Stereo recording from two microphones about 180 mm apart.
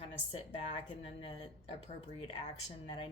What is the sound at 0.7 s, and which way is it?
Speech, 35° left (ahead or behind).